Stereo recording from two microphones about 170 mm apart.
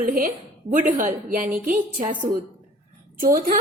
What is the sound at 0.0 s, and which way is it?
A woman's voice, 50° right (ahead or behind).